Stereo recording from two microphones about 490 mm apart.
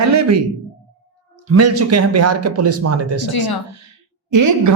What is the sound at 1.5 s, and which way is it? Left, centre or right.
Speech, right.